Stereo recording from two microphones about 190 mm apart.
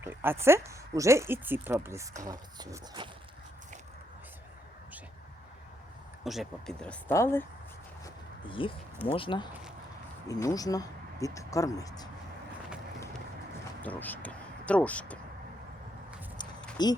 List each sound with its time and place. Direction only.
0.0 s speech: 10° right (ahead or behind)
6.2 s speech: centre (ahead or behind)
8.0 s a sound: 25° left (ahead or behind)
9.0 s speech: 30° left (ahead or behind)
13.8 s speech: 10° left (ahead or behind)
16.4 s a sound: 25° left (ahead or behind)
16.8 s speech: 20° left (ahead or behind)